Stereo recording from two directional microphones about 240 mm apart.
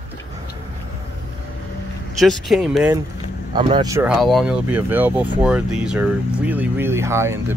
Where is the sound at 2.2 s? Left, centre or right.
Centre.